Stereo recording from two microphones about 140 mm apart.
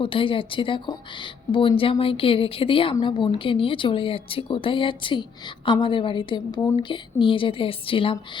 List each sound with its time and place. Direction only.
0.0 s speech: 40° left (ahead or behind)